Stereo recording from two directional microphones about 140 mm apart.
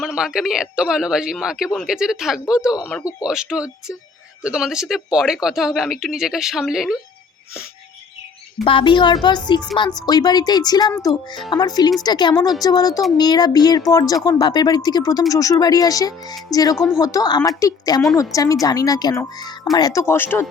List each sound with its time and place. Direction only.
0.0 s speech: 5° right (ahead or behind)
3.0 s speech: 25° left (ahead or behind)
3.2 s speech: 5° right (ahead or behind)
8.6 s speech: 35° left (ahead or behind); by 20.4 s 15° left (ahead or behind)